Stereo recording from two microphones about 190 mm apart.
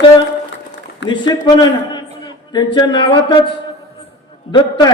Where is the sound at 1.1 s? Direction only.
25° left (ahead or behind).